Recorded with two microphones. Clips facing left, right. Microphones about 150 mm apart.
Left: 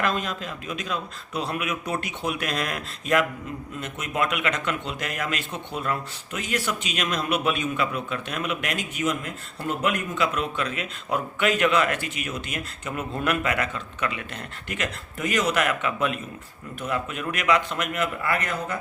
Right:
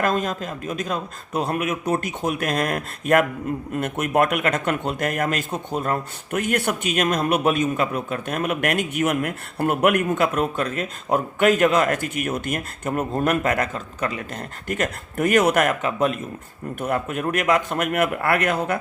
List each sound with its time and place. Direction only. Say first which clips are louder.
0.0 s speech: right 4 dB; 45° right (ahead or behind); by 18.8 s 70° right (ahead or behind)